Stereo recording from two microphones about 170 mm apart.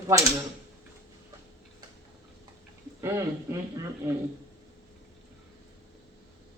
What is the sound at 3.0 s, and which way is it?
Speech, 15° right (ahead or behind).